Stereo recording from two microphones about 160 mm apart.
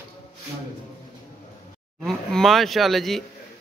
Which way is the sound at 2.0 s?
Centre (ahead or behind).